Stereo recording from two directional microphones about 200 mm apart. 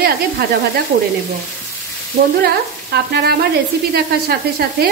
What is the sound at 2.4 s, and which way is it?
Frying, 55° right (ahead or behind).